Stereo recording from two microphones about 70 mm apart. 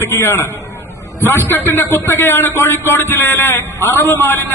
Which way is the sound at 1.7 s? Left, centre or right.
Left.